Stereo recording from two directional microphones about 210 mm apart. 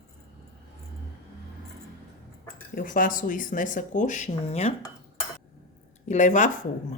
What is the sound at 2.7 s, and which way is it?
Speech, 40° left (ahead or behind).